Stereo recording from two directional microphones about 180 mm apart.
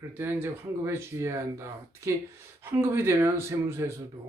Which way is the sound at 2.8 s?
15° right (ahead or behind).